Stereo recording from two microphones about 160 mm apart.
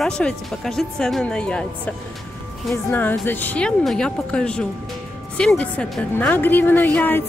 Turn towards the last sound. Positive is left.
turn(degrees=10)  # may be behind; listen again after turning